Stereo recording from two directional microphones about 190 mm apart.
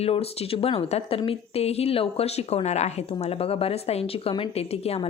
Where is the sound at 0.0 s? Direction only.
30° left (ahead or behind).